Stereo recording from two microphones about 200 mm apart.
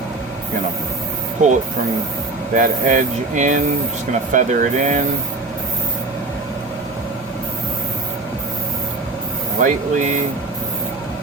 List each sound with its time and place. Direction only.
1.4 s speech: 35° right (ahead or behind)
2.6 s speech: 40° right (ahead or behind)
9.6 s speech: 40° right (ahead or behind)